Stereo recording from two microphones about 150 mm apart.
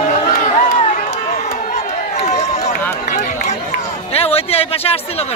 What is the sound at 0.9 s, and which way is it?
Run, 45° left (ahead or behind).